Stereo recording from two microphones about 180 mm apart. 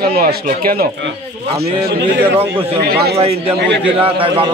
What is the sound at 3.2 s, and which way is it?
A man's voice, 35° right (ahead or behind).